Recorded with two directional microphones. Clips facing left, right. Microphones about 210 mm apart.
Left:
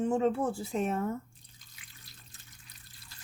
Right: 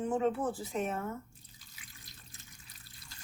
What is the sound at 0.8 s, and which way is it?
Speech, 30° left (ahead or behind).